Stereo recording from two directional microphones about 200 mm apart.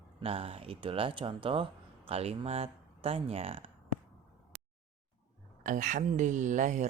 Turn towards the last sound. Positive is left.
turn(degrees=-40)  # may be behind; listen again after turning